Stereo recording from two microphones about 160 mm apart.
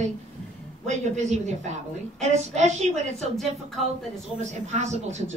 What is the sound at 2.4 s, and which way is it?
Speech, 45° right (ahead or behind).